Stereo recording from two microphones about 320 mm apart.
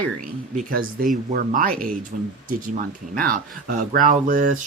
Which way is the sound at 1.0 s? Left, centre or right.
Right.